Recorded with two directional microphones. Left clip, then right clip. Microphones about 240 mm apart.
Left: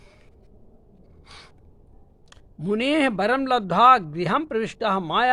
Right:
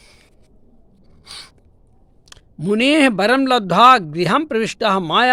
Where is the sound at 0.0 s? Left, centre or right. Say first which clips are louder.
Right 5 dB; right.